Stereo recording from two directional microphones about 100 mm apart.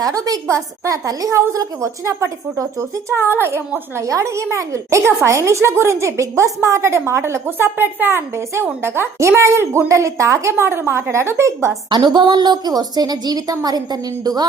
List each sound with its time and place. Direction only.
0.0 s a woman's voice: 35° right (ahead or behind)
11.9 s a woman's voice: 45° right (ahead or behind)